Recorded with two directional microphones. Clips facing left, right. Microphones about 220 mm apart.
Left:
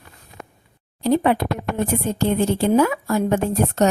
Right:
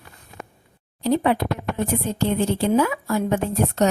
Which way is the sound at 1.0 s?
50° left (ahead or behind).